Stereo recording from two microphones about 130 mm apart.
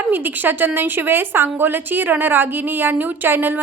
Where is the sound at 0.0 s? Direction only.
15° right (ahead or behind).